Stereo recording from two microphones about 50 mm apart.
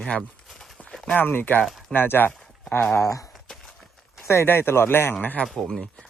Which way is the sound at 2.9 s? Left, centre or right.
Left.